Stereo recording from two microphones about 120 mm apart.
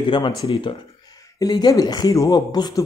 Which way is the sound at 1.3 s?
35° left (ahead or behind).